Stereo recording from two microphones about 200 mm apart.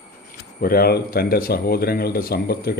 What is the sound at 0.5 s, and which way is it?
Speech, 45° left (ahead or behind).